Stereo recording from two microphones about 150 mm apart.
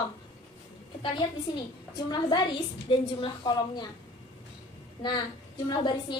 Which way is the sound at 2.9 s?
30° left (ahead or behind).